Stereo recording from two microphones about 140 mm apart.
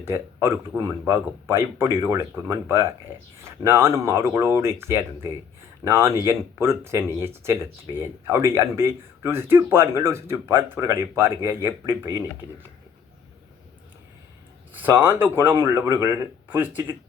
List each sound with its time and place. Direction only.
0.0 s speech: 15° right (ahead or behind)
14.7 s speech: 15° right (ahead or behind)